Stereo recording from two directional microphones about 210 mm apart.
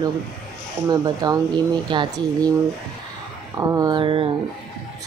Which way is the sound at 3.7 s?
15° right (ahead or behind).